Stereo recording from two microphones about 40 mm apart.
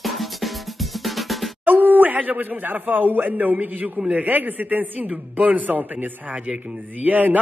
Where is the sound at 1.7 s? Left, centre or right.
Right.